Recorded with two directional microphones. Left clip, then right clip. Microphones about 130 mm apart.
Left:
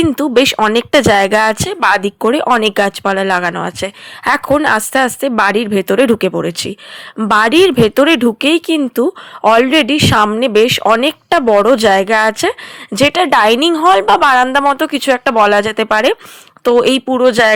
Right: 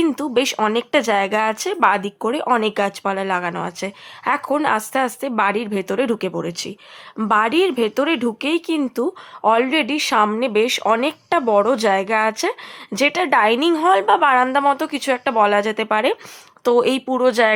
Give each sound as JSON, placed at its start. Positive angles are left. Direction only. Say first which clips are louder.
{"t": 0.0, "sound": "speech", "louder": "left 8 dB", "side_deg": 40}
{"t": 14.4, "sound": "speech", "louder": "left 5 dB", "side_deg": 25}